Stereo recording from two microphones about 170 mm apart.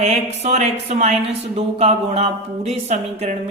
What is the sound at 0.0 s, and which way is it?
Speech, 40° right (ahead or behind).